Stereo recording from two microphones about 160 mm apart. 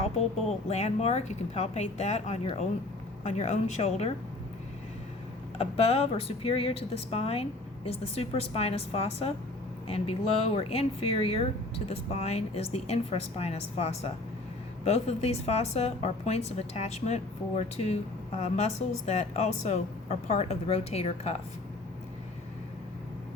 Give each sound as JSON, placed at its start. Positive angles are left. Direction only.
{"t": 0.7, "sound": "a woman's voice", "side_deg": 40}
{"t": 5.5, "sound": "a woman's voice", "side_deg": 40}